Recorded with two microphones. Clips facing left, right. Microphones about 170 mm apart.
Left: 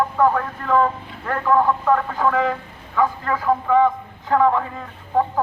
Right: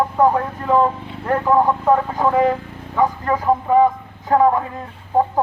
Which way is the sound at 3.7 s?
40° right (ahead or behind).